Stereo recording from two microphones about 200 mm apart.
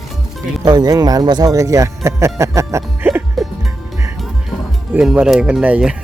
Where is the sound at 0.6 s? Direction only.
20° right (ahead or behind).